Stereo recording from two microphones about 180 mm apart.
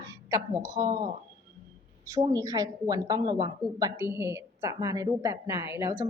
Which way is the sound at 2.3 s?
20° right (ahead or behind).